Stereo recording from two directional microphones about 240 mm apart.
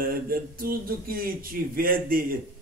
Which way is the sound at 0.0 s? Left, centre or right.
Right.